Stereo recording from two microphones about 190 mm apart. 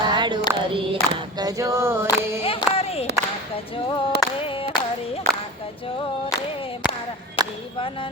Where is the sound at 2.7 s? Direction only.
30° left (ahead or behind).